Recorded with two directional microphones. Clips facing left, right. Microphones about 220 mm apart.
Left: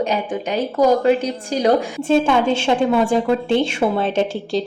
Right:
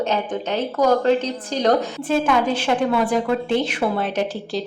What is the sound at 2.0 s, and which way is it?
Speech, 25° left (ahead or behind).